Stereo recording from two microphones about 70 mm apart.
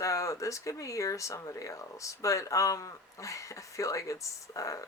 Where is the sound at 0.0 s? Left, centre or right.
Left.